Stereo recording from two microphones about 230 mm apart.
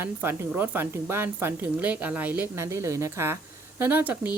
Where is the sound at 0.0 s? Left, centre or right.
Centre.